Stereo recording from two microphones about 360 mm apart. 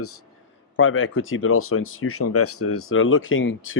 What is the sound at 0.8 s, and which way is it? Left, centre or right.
Speech, left.